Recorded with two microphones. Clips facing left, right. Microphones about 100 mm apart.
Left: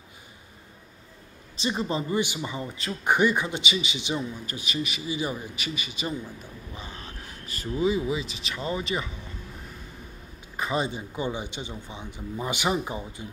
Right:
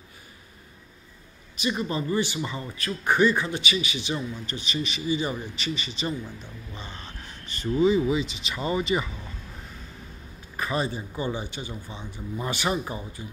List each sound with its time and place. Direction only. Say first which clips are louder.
1.6 s speech: even; 25° left (ahead or behind); by 9.1 s centre (ahead or behind)
10.5 s speech: even; 20° left (ahead or behind)